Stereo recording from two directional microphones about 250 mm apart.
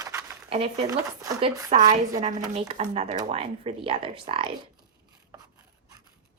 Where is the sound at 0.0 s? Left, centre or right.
Centre.